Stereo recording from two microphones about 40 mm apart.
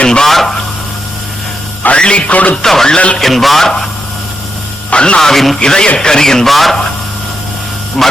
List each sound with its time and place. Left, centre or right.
0.0 s speech: left
0.3 s a man's voice: centre
2.0 s music: left
2.6 s a man's voice: centre
3.2 s a man's voice: centre
4.9 s a man's voice: left
5.2 s a man's voice: centre
5.5 s music: centre
6.0 s a man's voice: centre
6.5 s a man's voice: centre
8.0 s a man's voice: centre